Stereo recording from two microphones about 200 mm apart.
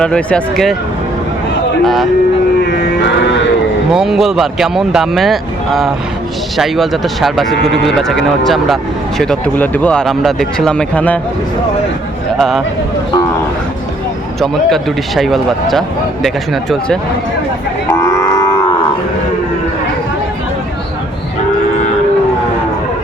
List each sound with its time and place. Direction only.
0.0 s speech: 5° left (ahead or behind)
1.8 s speech: centre (ahead or behind)
2.6 s music: 55° left (ahead or behind)
3.9 s speech: centre (ahead or behind)
7.5 s speech: 60° left (ahead or behind)
7.9 s speech: centre (ahead or behind)
12.4 s speech: centre (ahead or behind)
14.4 s speech: centre (ahead or behind)
17.9 s cattle: 15° left (ahead or behind)